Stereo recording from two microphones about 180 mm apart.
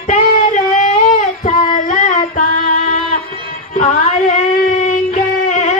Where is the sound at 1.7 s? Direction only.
40° left (ahead or behind).